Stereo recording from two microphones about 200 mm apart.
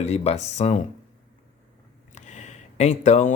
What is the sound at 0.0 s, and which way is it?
Speech, 35° left (ahead or behind).